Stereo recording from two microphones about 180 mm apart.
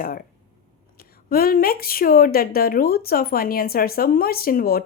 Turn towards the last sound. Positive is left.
turn(degrees=55)  # may be behind; listen again after turning